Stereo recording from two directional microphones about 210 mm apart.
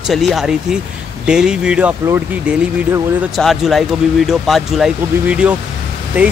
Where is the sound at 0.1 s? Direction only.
Centre (ahead or behind).